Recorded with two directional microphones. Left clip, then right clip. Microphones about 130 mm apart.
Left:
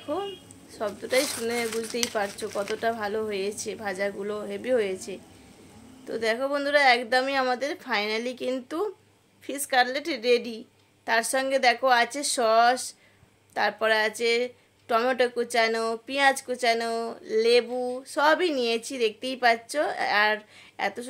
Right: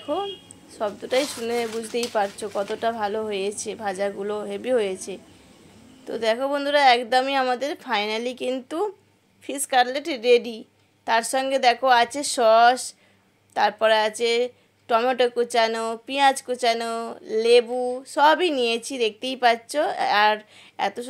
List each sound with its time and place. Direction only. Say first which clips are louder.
0.7 s speech: right 2 dB; 15° right (ahead or behind)
6.0 s speech: right 3 dB; 20° right (ahead or behind)